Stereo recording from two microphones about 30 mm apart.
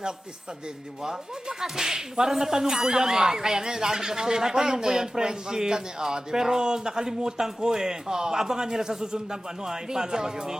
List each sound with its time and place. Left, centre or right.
1.0 s whip: centre